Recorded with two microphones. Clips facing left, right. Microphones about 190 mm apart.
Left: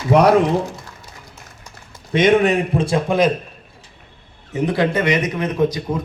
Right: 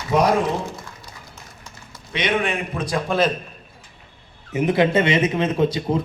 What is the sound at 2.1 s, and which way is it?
A man's voice, 45° left (ahead or behind).